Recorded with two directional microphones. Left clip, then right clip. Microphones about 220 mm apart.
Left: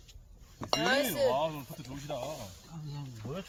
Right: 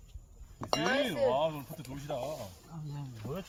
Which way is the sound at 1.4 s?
25° right (ahead or behind).